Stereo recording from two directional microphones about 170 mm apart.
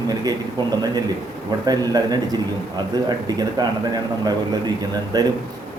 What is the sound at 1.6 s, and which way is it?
Speech, 20° right (ahead or behind).